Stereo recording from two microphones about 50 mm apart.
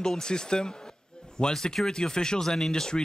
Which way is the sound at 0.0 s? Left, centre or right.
Centre.